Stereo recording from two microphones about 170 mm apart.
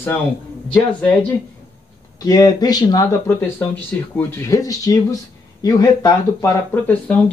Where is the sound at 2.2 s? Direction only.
25° left (ahead or behind).